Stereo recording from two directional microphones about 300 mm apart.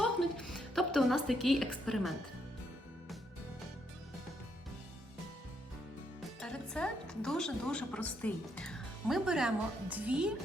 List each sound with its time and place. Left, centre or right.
0.0 s music: centre
6.4 s a woman's voice: centre